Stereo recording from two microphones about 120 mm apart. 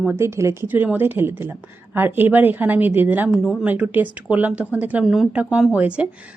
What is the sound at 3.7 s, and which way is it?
Speech, 15° right (ahead or behind).